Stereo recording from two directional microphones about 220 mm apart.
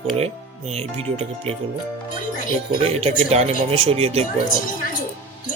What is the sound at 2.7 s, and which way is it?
Speech, 25° right (ahead or behind).